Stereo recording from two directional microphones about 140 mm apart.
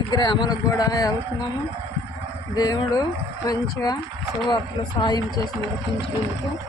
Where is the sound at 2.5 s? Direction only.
25° left (ahead or behind).